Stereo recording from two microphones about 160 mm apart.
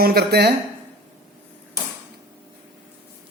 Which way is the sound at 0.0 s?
75° right (ahead or behind).